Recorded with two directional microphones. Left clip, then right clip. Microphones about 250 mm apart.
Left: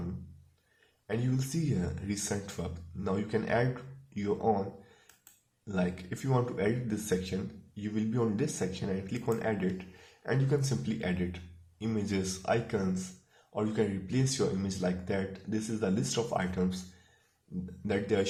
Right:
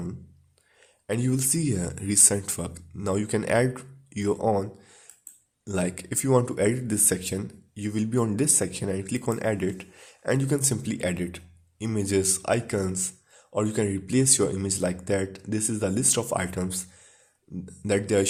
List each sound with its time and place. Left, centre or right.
1.0 s speech: right
5.6 s speech: right
17.8 s speech: right